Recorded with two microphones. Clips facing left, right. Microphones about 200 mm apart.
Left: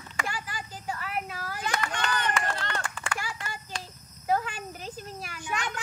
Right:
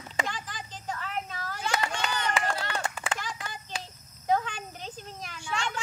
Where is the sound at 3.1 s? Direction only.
10° left (ahead or behind).